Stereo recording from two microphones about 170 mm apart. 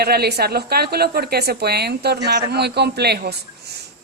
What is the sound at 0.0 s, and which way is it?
A woman's voice, 70° right (ahead or behind).